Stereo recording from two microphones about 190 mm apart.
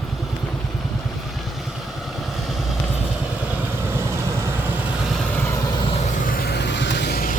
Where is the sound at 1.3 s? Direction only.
Centre (ahead or behind).